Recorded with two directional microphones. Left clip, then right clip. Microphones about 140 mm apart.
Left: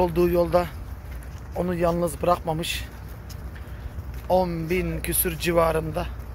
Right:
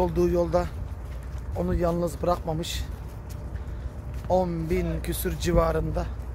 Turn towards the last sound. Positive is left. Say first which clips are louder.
# left 3 dB
turn(degrees=10)  # may be behind; listen again after turning